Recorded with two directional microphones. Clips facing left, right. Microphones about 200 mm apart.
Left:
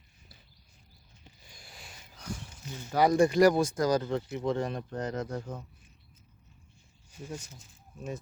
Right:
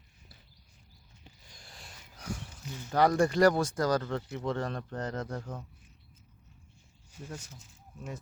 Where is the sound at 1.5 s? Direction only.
Centre (ahead or behind).